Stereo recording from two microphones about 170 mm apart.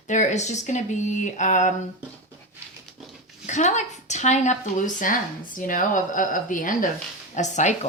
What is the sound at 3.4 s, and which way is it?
A woman's voice, 45° left (ahead or behind).